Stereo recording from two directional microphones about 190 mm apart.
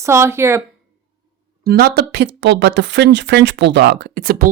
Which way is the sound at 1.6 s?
55° right (ahead or behind).